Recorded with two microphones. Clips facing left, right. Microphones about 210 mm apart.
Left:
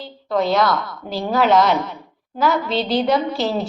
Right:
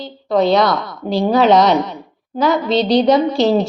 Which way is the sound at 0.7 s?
75° right (ahead or behind).